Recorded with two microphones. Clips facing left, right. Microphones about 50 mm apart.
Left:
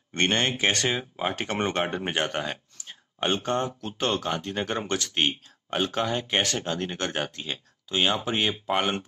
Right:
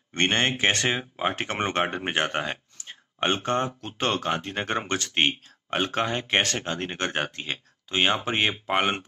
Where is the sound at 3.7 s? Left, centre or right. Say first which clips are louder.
Even; right.